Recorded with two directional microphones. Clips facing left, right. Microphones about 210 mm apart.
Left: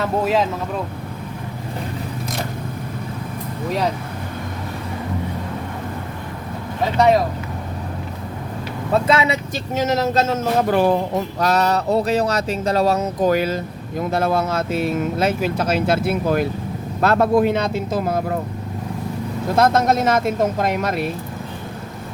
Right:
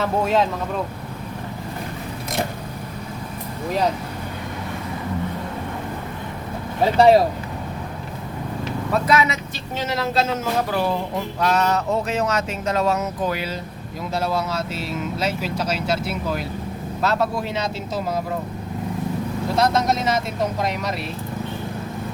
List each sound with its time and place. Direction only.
0.0 s speech: centre (ahead or behind)
6.8 s speech: 30° right (ahead or behind)
8.9 s speech: 25° left (ahead or behind)
9.7 s speech: 45° left (ahead or behind)
19.5 s speech: 50° left (ahead or behind)